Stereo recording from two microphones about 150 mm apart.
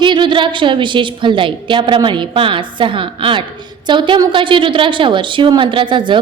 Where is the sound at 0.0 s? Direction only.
30° right (ahead or behind).